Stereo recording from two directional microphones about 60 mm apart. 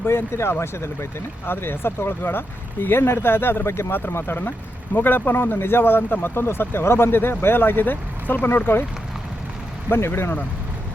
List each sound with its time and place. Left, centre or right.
0.0 s speech: left
4.2 s speech: left
9.9 s speech: left